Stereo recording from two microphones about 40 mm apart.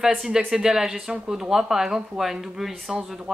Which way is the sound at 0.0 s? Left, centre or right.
Centre.